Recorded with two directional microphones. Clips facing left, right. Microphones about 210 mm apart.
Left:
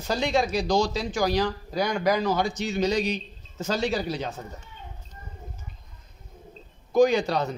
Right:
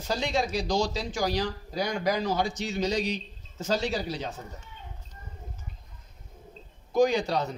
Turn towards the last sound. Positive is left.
turn(degrees=65)  # may be behind; listen again after turning